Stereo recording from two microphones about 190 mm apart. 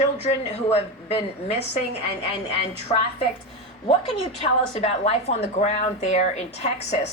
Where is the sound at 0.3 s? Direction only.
35° left (ahead or behind).